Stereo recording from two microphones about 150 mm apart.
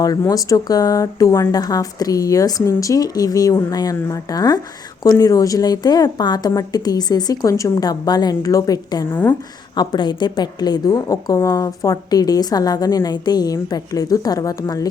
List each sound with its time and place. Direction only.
0.0 s a woman's voice: 25° left (ahead or behind)